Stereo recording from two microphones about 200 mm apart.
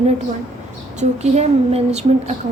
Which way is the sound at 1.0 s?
35° right (ahead or behind).